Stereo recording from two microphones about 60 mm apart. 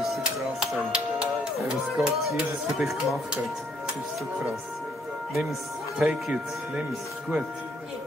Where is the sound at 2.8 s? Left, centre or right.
Centre.